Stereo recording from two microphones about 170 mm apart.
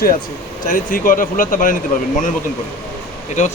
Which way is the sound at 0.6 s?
50° left (ahead or behind).